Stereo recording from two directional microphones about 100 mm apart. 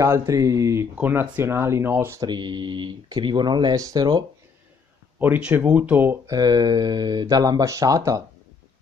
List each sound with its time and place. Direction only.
0.0 s speech: 30° right (ahead or behind)
0.9 s speech: 20° right (ahead or behind)
2.1 s speech: 50° right (ahead or behind)
5.2 s speech: 15° right (ahead or behind)
6.2 s speech: 40° right (ahead or behind)